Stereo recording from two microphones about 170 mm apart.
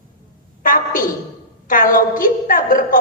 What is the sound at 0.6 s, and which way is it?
A woman's voice, 55° left (ahead or behind).